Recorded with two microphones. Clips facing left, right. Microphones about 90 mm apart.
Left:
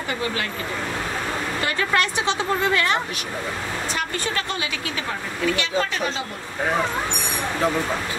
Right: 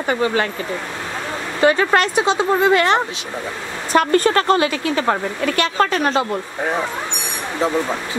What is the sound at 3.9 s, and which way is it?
A woman's voice, 50° right (ahead or behind).